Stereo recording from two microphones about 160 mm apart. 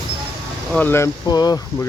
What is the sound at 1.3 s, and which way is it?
Speech, 25° left (ahead or behind).